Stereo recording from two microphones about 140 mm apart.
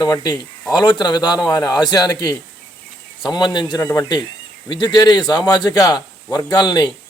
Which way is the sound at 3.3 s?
30° left (ahead or behind).